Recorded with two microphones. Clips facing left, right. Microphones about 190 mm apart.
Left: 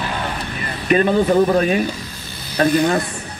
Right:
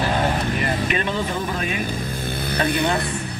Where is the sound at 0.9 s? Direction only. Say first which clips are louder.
Left 9 dB; 40° left (ahead or behind).